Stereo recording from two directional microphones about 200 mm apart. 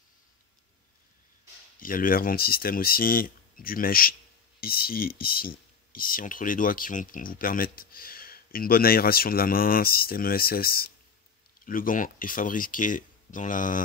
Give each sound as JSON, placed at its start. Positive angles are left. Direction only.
{"t": 1.8, "sound": "speech", "side_deg": 45}